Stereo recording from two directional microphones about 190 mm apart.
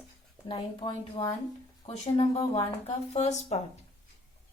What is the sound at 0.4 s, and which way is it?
A woman's voice, 25° left (ahead or behind).